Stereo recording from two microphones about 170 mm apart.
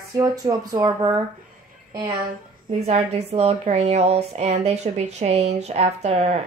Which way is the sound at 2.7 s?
40° right (ahead or behind).